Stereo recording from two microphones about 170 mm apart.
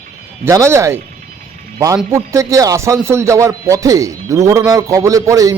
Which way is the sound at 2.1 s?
15° right (ahead or behind).